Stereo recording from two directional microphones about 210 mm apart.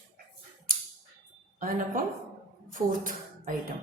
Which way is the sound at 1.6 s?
40° right (ahead or behind).